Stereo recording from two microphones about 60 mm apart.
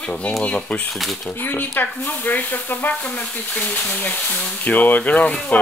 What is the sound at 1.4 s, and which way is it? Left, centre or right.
Speech, left.